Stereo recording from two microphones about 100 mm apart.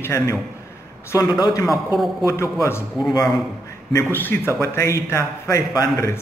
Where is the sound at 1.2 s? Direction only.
45° left (ahead or behind).